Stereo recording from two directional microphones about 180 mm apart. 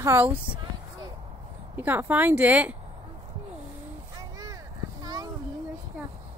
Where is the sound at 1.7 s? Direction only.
10° right (ahead or behind).